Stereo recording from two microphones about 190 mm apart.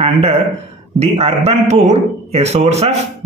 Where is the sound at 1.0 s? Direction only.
35° right (ahead or behind).